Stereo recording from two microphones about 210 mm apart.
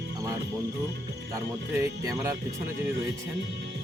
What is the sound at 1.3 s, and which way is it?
Speech, 15° right (ahead or behind).